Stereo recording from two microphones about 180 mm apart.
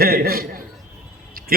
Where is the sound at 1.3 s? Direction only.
55° right (ahead or behind).